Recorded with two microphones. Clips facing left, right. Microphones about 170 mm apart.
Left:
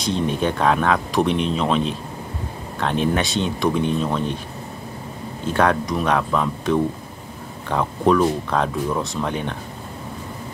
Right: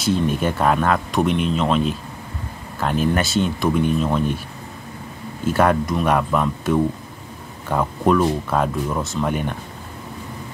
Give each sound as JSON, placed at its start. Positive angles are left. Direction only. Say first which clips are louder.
{"t": 0.0, "sound": "speech", "louder": "right 1 dB", "side_deg": -5}
{"t": 5.5, "sound": "speech", "louder": "right 1 dB", "side_deg": -5}